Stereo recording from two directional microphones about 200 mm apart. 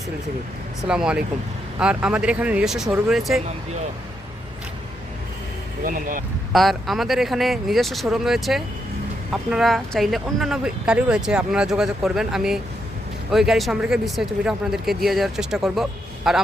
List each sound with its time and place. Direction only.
0.9 s speech: 5° right (ahead or behind)
5.8 s speech: 45° right (ahead or behind)
6.5 s speech: centre (ahead or behind)